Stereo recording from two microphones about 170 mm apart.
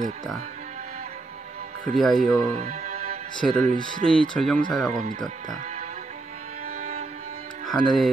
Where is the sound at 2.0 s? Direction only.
Centre (ahead or behind).